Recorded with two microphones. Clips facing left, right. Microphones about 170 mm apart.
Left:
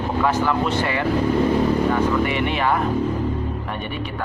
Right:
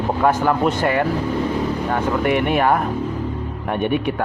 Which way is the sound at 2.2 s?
55° right (ahead or behind).